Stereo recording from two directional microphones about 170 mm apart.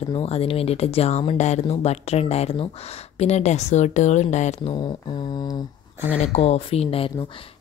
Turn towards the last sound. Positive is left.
turn(degrees=35)  # may be behind; listen again after turning